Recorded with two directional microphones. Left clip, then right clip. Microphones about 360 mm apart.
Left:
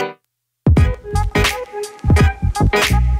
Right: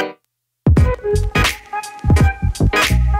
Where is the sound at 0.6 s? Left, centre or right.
Centre.